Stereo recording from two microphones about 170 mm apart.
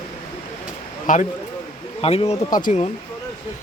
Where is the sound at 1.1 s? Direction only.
50° left (ahead or behind).